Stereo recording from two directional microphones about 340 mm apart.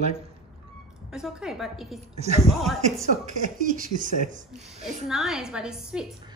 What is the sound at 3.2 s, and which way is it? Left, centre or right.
Speech, right.